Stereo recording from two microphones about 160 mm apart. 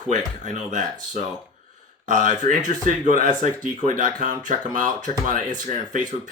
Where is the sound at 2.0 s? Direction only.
50° right (ahead or behind).